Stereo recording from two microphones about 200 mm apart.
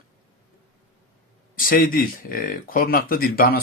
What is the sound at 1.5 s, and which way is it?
Speech, 45° left (ahead or behind).